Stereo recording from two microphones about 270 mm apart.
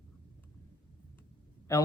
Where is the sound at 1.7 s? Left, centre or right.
Centre.